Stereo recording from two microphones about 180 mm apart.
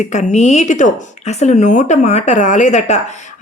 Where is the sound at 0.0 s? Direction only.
40° left (ahead or behind).